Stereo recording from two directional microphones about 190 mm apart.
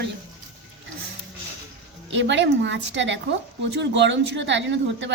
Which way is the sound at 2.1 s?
70° right (ahead or behind).